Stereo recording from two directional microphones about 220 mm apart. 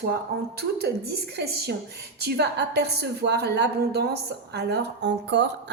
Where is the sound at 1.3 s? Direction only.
50° right (ahead or behind).